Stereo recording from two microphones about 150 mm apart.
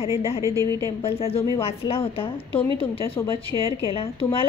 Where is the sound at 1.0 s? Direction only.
40° left (ahead or behind).